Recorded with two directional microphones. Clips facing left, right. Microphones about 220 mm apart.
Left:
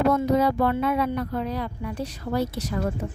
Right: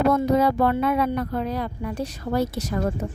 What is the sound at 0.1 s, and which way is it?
Speech, 50° right (ahead or behind).